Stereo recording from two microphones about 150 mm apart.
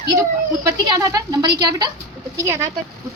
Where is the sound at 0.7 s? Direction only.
25° right (ahead or behind).